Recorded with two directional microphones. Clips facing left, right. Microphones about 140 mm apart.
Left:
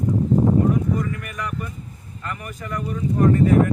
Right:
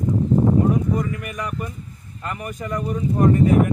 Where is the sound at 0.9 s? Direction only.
20° right (ahead or behind).